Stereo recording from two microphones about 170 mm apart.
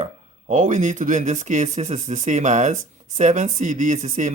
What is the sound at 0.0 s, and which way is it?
Speech, 45° right (ahead or behind).